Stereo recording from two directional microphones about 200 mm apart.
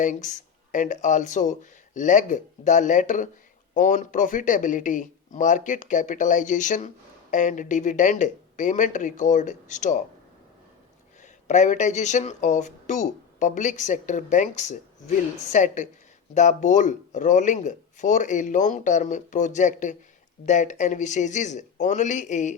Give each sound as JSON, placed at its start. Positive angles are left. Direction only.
{"t": 0.0, "sound": "speech", "side_deg": 40}
{"t": 11.2, "sound": "speech", "side_deg": 35}